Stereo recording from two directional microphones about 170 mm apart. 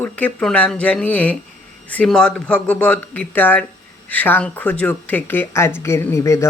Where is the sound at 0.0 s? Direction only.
10° left (ahead or behind).